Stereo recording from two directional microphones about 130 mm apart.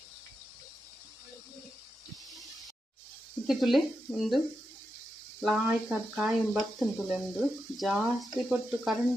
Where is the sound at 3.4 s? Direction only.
Centre (ahead or behind).